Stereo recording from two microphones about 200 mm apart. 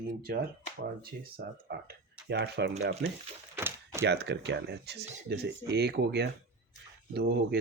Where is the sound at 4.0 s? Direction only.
55° right (ahead or behind).